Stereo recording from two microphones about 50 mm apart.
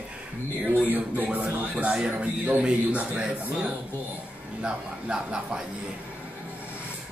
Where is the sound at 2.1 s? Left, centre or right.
Right.